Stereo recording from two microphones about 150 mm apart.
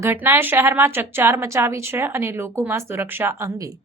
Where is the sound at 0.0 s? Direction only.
15° right (ahead or behind).